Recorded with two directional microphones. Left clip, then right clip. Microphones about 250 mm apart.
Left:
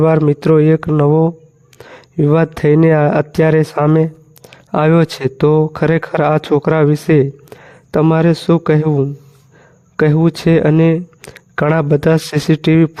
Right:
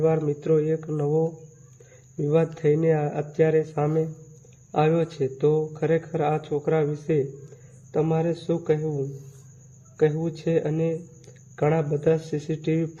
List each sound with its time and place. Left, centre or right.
0.0 s speech: left